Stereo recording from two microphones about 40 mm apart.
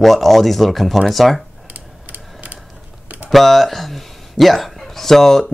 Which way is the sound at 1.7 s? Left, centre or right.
Right.